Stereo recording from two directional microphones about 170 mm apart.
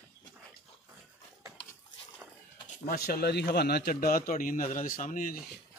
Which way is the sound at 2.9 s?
65° left (ahead or behind).